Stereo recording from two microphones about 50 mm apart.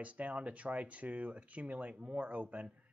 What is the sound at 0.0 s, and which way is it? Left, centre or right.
Speech, right.